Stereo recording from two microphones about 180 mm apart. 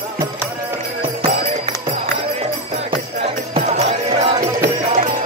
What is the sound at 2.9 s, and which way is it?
Music, 30° right (ahead or behind).